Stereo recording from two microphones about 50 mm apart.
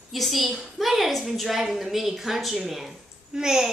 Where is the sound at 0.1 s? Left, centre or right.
Centre.